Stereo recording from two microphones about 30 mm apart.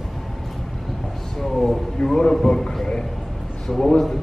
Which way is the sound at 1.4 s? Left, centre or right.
Centre.